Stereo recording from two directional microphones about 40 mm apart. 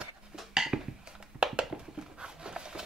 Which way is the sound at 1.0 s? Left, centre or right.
Right.